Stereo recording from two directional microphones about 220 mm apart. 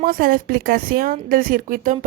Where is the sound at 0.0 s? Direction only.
40° right (ahead or behind).